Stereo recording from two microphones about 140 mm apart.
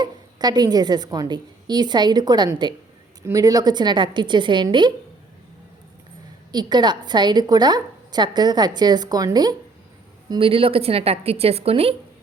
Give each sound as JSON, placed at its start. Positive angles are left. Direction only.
{"t": 0.0, "sound": "a woman's voice", "side_deg": -30}
{"t": 6.5, "sound": "a woman's voice", "side_deg": -30}